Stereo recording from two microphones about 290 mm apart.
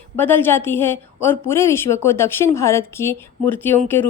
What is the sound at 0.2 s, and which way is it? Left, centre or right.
A woman's voice, centre.